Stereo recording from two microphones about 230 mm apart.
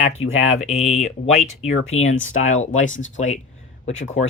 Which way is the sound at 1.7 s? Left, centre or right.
Left.